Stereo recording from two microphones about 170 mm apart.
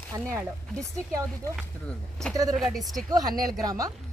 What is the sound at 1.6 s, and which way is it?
Speech, 5° left (ahead or behind).